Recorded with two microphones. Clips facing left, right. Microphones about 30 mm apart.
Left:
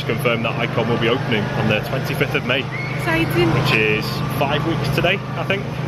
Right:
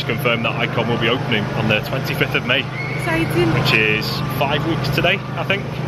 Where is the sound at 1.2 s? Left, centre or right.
Right.